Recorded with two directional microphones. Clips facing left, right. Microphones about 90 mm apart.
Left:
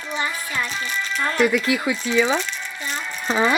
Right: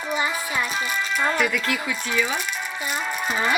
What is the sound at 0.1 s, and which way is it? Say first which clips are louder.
Music: right 1 dB; 10° right (ahead or behind).